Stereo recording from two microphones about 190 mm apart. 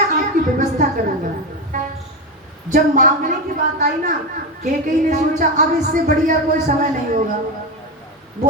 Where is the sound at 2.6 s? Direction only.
45° right (ahead or behind).